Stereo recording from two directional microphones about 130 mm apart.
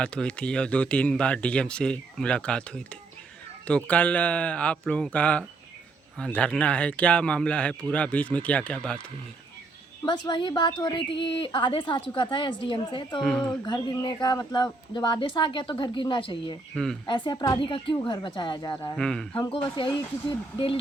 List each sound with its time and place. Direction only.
0.0 s speech: 10° left (ahead or behind)
10.1 s a woman's voice: 35° left (ahead or behind)
13.2 s speech: 5° left (ahead or behind)
13.7 s a woman's voice: 30° left (ahead or behind)
16.7 s speech: 5° left (ahead or behind)
17.1 s a woman's voice: 40° left (ahead or behind)
18.9 s speech: 5° left (ahead or behind)